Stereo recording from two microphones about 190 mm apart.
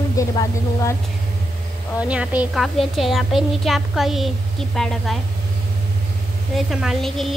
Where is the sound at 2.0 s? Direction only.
5° right (ahead or behind).